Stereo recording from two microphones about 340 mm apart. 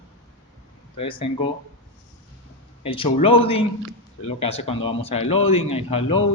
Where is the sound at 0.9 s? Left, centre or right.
Centre.